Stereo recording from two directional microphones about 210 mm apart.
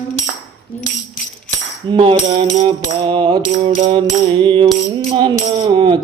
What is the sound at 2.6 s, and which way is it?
Music, 25° right (ahead or behind).